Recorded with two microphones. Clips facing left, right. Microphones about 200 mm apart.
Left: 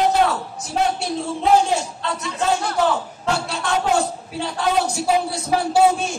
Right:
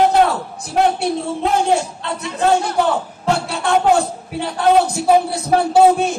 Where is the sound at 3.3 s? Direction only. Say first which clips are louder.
Right 4 dB; 60° right (ahead or behind).